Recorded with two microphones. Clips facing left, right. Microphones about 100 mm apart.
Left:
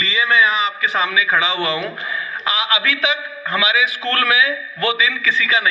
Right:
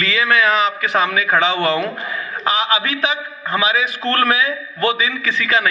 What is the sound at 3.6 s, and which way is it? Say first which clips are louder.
A man's voice: right 1 dB; 45° right (ahead or behind).